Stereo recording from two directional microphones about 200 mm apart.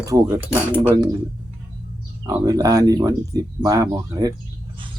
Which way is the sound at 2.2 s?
20° right (ahead or behind).